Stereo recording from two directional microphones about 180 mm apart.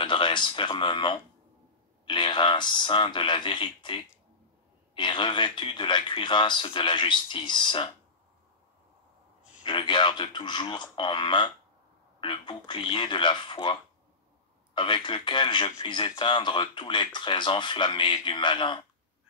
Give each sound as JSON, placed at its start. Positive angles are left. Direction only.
{"t": 0.0, "sound": "speech", "side_deg": 25}
{"t": 9.7, "sound": "speech", "side_deg": 25}